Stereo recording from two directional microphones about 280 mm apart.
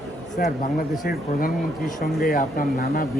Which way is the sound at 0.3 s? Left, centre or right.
Left.